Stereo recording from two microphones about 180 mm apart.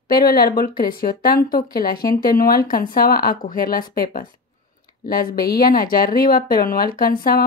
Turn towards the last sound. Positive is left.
turn(degrees=55)  # may be behind; listen again after turning